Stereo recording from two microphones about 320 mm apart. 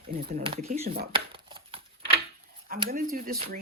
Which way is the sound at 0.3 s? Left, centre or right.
Right.